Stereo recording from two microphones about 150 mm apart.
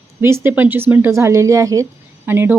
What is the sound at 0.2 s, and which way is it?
A woman's voice, 15° right (ahead or behind).